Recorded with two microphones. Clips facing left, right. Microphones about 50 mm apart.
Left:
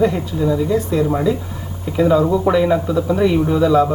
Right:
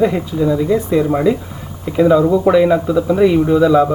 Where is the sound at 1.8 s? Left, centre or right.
Centre.